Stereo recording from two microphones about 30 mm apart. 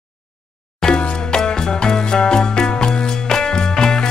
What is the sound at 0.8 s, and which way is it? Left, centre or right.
Music, left.